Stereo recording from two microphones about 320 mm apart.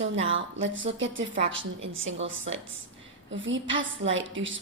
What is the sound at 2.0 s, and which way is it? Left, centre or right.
Speech, right.